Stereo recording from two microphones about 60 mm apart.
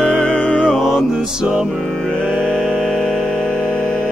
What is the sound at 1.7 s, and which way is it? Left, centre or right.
Music, centre.